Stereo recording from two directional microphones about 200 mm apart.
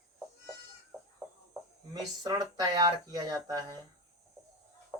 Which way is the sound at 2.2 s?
20° right (ahead or behind).